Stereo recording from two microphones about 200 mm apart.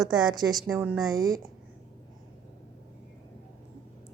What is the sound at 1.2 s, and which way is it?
Speech, 15° right (ahead or behind).